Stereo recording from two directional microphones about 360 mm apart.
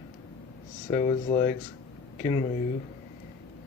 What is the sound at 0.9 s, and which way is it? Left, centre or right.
Speech, centre.